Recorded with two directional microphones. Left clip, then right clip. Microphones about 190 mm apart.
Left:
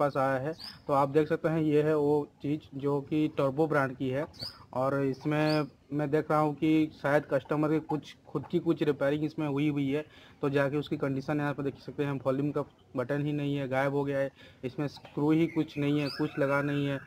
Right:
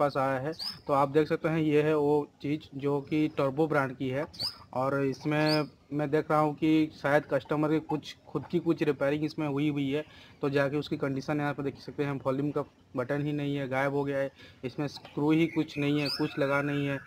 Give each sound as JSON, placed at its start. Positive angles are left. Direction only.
{"t": 0.0, "sound": "speech", "side_deg": 0}